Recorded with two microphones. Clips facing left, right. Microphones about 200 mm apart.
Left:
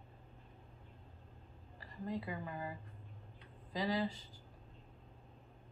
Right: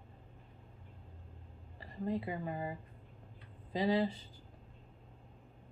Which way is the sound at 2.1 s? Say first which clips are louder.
Right 5 dB; 25° right (ahead or behind).